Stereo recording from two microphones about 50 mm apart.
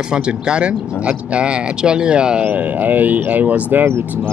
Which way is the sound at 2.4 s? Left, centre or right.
Right.